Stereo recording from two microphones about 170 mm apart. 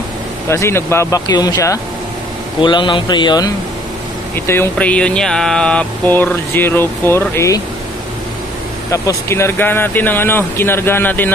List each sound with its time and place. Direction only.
0.5 s speech: 15° left (ahead or behind)
4.5 s speech: 10° left (ahead or behind)
8.9 s speech: 15° left (ahead or behind)